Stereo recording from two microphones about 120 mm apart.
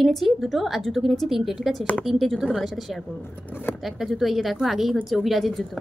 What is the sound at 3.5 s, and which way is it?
Speech, 15° left (ahead or behind).